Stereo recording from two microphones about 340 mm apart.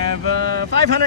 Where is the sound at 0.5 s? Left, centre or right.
Right.